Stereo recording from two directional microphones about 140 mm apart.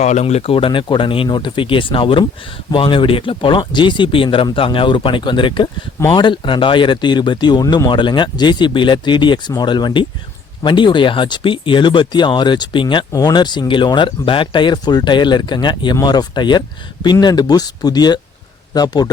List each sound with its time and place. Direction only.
0.0 s speech: 55° left (ahead or behind); by 19.1 s 30° left (ahead or behind)